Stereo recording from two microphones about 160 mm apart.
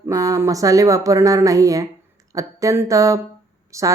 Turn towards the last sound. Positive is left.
turn(degrees=-20)  # may be behind; listen again after turning